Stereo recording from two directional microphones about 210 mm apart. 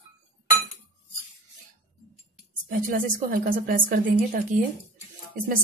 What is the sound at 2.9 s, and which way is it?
A woman's voice, 40° right (ahead or behind).